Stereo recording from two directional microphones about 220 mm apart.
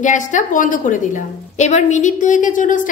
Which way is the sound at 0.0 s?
35° left (ahead or behind).